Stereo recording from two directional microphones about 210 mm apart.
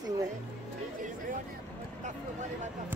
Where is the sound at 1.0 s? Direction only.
40° right (ahead or behind).